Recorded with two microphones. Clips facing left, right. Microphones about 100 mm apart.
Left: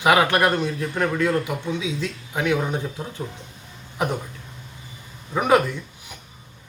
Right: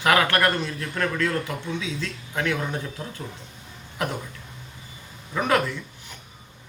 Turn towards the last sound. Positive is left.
turn(degrees=15)  # may be behind; listen again after turning